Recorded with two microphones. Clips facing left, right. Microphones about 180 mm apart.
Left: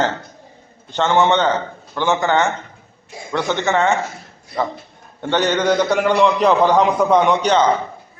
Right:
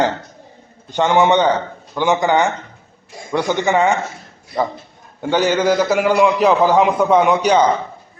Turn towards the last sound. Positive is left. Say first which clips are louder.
# right 2 dB
turn(degrees=-10)  # may be behind; listen again after turning